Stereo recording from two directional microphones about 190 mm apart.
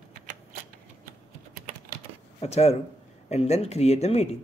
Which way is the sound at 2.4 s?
35° left (ahead or behind).